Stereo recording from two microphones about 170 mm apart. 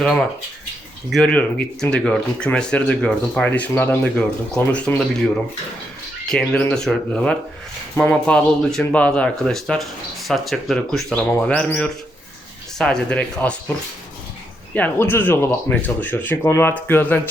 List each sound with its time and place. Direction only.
0.0 s speech: 5° left (ahead or behind)
6.3 s speech: 5° left (ahead or behind)
14.7 s speech: 10° left (ahead or behind)